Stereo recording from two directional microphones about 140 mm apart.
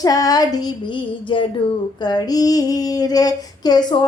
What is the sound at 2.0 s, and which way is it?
Female singing, 30° left (ahead or behind).